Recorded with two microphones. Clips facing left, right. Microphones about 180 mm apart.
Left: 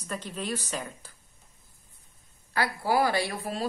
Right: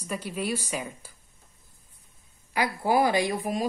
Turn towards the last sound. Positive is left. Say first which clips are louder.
# right 4 dB
turn(degrees=-15)  # may be behind; listen again after turning